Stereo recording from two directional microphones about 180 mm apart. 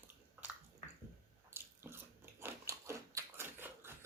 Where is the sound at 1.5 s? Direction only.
15° right (ahead or behind).